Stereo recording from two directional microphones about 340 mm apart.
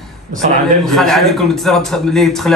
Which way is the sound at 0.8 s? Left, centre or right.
Centre.